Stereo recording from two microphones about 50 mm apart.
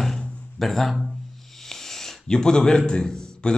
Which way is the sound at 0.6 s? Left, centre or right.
Centre.